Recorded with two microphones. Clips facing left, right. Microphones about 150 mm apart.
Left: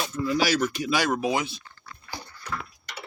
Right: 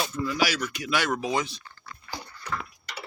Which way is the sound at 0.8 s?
15° left (ahead or behind).